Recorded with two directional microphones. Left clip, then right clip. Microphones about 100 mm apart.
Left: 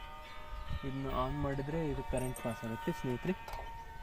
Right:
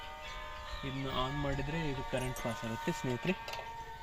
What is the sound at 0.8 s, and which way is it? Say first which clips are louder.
Speech: even; 35° right (ahead or behind).